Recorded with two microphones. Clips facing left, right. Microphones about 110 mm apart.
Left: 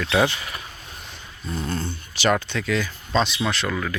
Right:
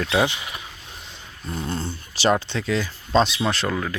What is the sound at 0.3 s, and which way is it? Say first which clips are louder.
Speech: even; 20° right (ahead or behind).